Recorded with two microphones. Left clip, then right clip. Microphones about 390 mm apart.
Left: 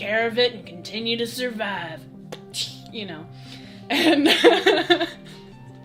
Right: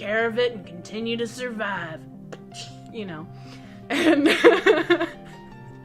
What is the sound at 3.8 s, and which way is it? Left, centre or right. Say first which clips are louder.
Music: left 1 dB; left.